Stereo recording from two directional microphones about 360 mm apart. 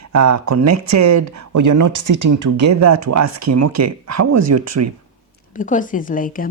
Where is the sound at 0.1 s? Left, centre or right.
Right.